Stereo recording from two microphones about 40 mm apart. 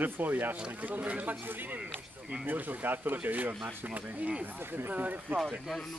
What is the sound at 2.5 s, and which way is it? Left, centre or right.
Speech, right.